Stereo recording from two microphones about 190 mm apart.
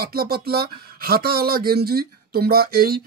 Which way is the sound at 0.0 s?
55° right (ahead or behind).